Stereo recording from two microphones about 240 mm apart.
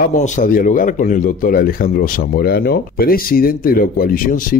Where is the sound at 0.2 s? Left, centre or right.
Left.